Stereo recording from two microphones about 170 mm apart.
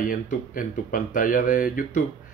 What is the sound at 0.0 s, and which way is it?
Speech, 55° left (ahead or behind).